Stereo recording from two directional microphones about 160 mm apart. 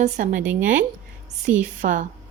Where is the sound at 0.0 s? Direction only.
50° right (ahead or behind).